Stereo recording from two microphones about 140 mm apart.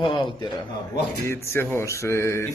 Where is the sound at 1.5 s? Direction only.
20° left (ahead or behind).